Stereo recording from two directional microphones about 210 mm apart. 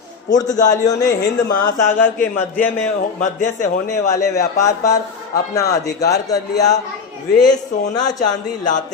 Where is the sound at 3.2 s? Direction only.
35° left (ahead or behind).